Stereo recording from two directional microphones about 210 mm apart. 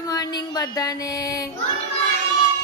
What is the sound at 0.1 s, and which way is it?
Music, 20° left (ahead or behind).